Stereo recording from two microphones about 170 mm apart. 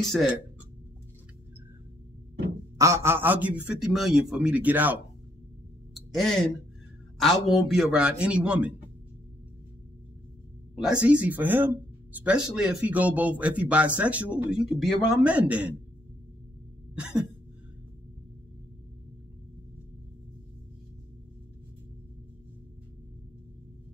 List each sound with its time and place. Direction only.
0.0 s speech: centre (ahead or behind)
2.8 s speech: 15° right (ahead or behind)
7.2 s speech: centre (ahead or behind)
10.8 s speech: 5° right (ahead or behind)